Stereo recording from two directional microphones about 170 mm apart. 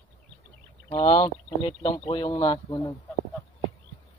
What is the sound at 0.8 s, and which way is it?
Speech, 30° left (ahead or behind).